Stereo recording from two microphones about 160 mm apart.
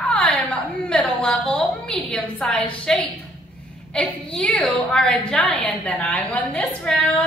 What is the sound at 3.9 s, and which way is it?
A woman's voice, 5° left (ahead or behind).